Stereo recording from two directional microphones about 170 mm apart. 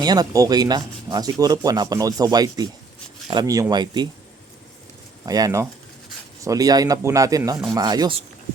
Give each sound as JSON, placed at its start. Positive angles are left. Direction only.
{"t": 0.0, "sound": "speech", "side_deg": -25}
{"t": 5.2, "sound": "speech", "side_deg": -20}